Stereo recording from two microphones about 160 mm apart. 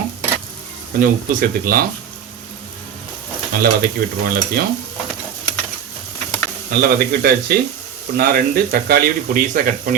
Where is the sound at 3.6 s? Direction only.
70° right (ahead or behind).